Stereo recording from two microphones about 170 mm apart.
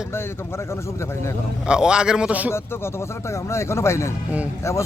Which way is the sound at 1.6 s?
5° right (ahead or behind).